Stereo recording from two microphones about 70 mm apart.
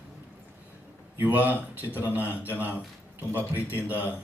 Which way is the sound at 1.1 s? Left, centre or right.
Right.